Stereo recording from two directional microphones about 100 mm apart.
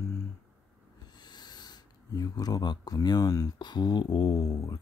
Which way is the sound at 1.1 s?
45° left (ahead or behind).